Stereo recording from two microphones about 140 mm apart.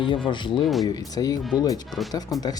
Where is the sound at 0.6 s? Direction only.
Centre (ahead or behind).